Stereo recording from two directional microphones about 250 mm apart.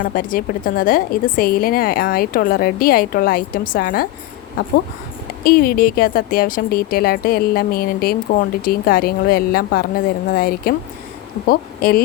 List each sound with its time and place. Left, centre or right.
0.0 s speech: left
5.4 s speech: left